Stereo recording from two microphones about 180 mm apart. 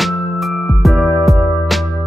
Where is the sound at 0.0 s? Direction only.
Centre (ahead or behind).